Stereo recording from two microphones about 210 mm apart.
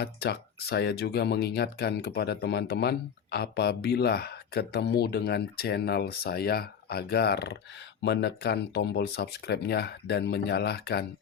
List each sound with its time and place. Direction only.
0.0 s speech: 50° left (ahead or behind)